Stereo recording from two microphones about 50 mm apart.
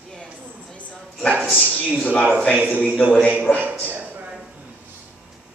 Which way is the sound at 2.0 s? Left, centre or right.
Left.